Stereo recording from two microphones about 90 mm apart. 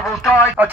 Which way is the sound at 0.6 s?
20° right (ahead or behind).